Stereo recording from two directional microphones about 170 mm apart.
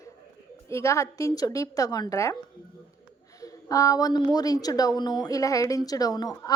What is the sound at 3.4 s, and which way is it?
A woman's voice, 20° left (ahead or behind).